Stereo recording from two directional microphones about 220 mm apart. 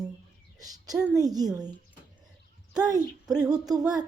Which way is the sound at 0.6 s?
15° right (ahead or behind).